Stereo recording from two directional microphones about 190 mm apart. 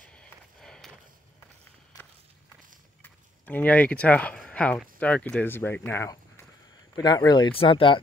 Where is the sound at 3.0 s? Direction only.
10° left (ahead or behind); by 8.0 s 25° left (ahead or behind).